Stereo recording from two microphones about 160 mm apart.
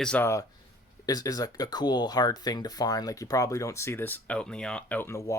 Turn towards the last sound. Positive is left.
turn(degrees=15)  # may be behind; listen again after turning